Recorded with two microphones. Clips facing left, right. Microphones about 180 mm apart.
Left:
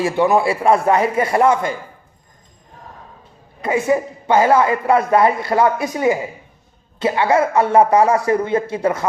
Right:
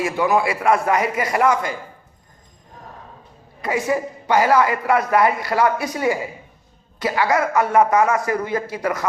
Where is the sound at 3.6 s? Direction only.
25° left (ahead or behind).